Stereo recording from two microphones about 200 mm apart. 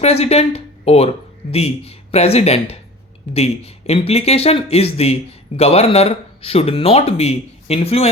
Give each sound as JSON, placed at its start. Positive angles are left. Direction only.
{"t": 0.0, "sound": "speech", "side_deg": 30}